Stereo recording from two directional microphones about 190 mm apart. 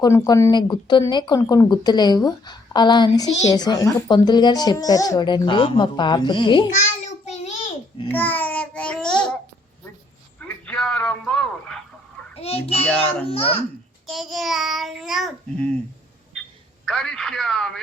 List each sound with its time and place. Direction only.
0.0 s speech: 15° left (ahead or behind)
6.7 s a sound: 35° left (ahead or behind)
8.0 s babbling: 10° left (ahead or behind)
10.4 s a sound: 5° left (ahead or behind)
12.4 s a child's voice: 35° left (ahead or behind)
14.1 s a child's voice: centre (ahead or behind)
16.8 s a child's voice: 5° left (ahead or behind)